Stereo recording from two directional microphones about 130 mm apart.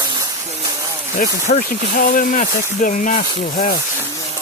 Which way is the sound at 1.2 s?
75° left (ahead or behind).